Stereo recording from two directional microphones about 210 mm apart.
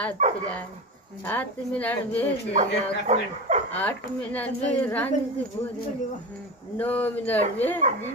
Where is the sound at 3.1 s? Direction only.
35° right (ahead or behind).